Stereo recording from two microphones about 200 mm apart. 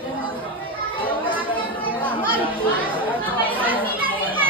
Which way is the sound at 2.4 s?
10° right (ahead or behind).